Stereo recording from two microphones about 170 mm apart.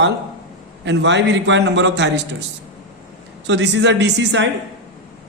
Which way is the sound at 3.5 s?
90° right.